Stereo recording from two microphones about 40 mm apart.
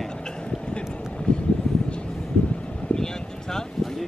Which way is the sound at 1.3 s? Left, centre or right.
Left.